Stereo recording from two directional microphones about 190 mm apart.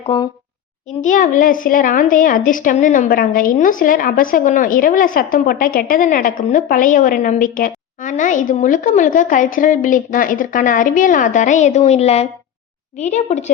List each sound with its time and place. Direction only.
0.0 s a woman's voice: 30° left (ahead or behind)
1.0 s a woman's voice: 45° left (ahead or behind)